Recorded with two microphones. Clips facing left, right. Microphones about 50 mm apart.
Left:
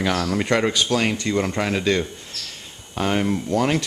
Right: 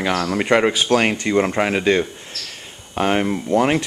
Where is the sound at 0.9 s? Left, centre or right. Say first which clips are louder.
Right 4 dB; right.